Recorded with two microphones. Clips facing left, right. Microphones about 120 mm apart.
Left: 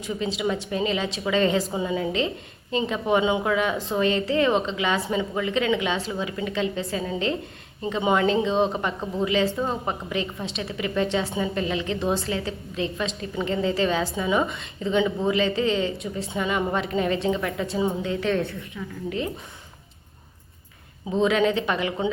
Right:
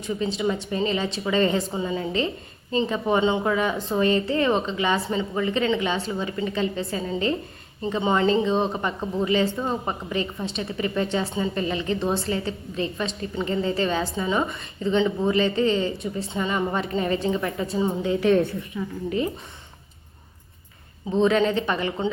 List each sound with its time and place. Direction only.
0.0 s a woman's voice: centre (ahead or behind)
18.8 s a woman's voice: 15° right (ahead or behind)
21.1 s a woman's voice: centre (ahead or behind)